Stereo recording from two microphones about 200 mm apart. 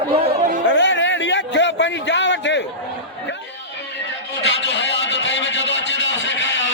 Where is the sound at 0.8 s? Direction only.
65° left (ahead or behind).